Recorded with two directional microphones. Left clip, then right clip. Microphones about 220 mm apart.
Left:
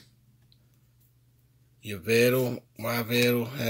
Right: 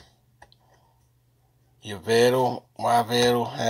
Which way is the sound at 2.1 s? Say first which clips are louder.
Right 4 dB; 45° left (ahead or behind).